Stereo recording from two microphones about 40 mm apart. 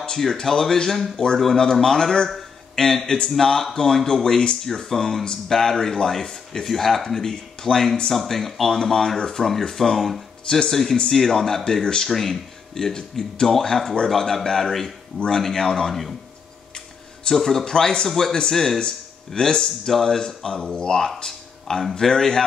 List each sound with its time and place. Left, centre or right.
0.2 s speech: centre
11.6 s speech: left; by 16.2 s centre
17.4 s speech: centre
18.8 s speech: centre